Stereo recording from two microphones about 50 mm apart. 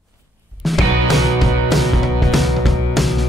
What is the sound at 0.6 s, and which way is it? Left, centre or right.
Music, centre.